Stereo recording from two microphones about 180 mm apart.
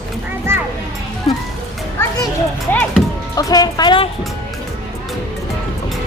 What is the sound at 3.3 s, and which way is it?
Music, 20° left (ahead or behind).